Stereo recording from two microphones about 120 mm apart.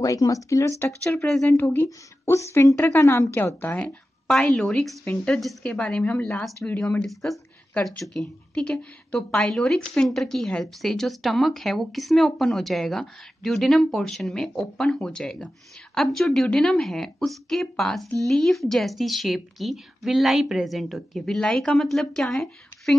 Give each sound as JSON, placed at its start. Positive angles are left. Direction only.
{"t": 0.0, "sound": "a woman's voice", "side_deg": 30}
{"t": 1.1, "sound": "a woman's voice", "side_deg": 5}
{"t": 1.5, "sound": "a woman's voice", "side_deg": 15}
{"t": 7.1, "sound": "a woman's voice", "side_deg": 0}